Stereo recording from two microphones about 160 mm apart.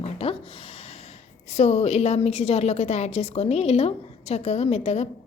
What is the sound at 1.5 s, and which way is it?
A woman's voice, 45° left (ahead or behind).